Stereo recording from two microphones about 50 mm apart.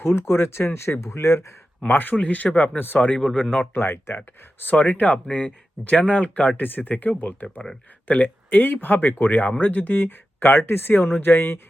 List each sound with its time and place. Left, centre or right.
0.0 s speech: left
1.9 s speech: left
2.6 s speech: left
3.8 s speech: left
4.7 s speech: left
5.3 s speech: left